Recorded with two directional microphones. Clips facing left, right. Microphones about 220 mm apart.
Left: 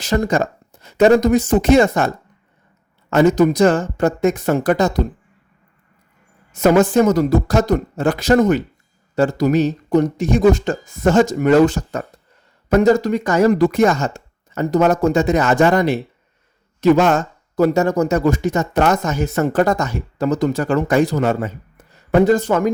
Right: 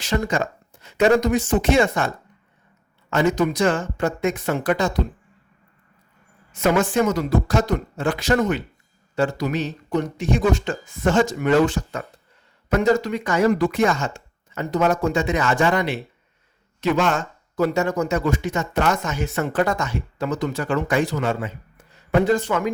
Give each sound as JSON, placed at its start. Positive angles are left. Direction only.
{"t": 0.0, "sound": "speech", "side_deg": 40}
{"t": 6.5, "sound": "speech", "side_deg": 40}